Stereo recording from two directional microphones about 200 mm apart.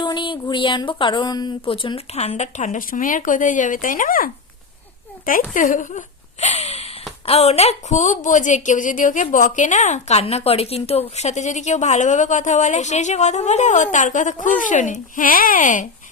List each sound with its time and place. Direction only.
0.0 s a woman's voice: 25° left (ahead or behind); by 15.9 s 40° left (ahead or behind)